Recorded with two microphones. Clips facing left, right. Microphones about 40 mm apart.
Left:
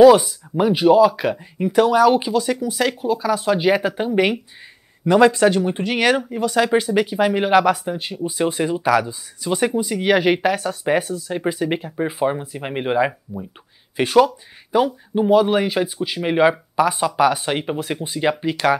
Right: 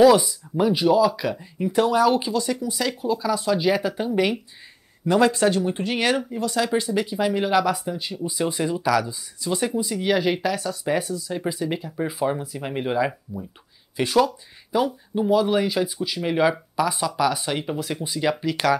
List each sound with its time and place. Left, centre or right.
0.2 s speech: left
2.6 s speech: left
5.0 s speech: left
12.3 s speech: left